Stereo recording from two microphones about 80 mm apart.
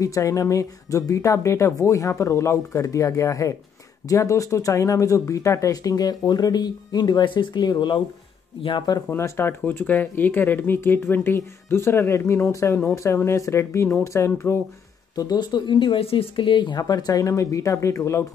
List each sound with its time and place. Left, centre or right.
0.0 s speech: left
9.1 s speech: left
15.1 s speech: left
16.8 s speech: left